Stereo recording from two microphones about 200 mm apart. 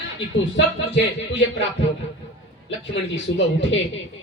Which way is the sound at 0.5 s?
65° left (ahead or behind).